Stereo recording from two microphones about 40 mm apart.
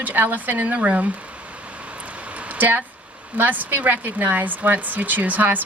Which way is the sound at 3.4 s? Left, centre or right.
Right.